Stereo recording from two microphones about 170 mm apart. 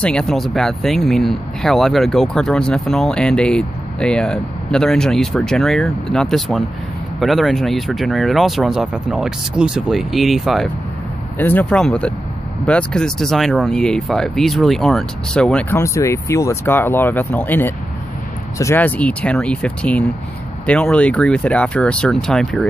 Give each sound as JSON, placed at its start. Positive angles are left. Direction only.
{"t": 0.0, "sound": "speech", "side_deg": 5}
{"t": 11.3, "sound": "speech", "side_deg": 10}